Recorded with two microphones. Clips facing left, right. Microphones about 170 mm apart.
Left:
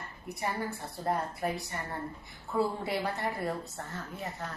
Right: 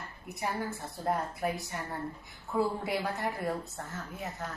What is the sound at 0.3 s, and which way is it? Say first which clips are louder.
A woman's voice: even; centre (ahead or behind).